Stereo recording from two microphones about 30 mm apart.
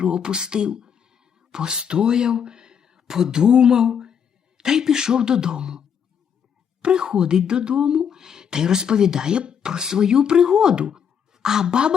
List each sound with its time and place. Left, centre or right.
0.0 s speech: right
6.8 s speech: right
7.9 s speech: centre